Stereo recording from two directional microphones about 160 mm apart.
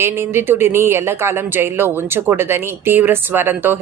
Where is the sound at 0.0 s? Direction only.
15° right (ahead or behind).